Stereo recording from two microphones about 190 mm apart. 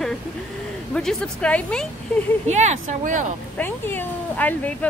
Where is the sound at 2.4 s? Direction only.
35° right (ahead or behind).